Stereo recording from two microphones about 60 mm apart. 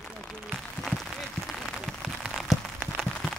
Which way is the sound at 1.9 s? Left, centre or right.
Centre.